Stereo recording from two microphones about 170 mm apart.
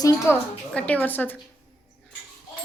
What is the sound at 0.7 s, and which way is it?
Speech, 10° left (ahead or behind).